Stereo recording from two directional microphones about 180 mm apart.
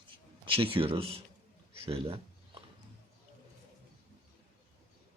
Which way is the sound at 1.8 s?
35° right (ahead or behind).